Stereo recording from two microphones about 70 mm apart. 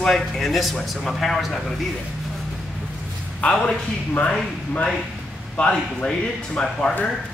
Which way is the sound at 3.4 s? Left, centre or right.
Centre.